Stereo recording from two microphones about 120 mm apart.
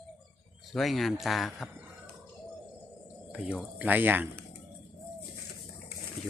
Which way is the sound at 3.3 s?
5° right (ahead or behind).